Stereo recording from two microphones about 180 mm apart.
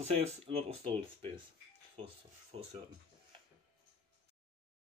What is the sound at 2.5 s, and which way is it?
Speech, 30° right (ahead or behind).